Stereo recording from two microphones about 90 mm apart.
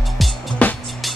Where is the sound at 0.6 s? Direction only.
15° left (ahead or behind).